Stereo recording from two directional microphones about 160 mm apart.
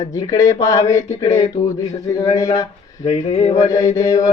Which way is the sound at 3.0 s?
35° left (ahead or behind).